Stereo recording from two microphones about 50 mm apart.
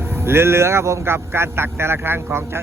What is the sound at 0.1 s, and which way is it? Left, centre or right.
Speech, right.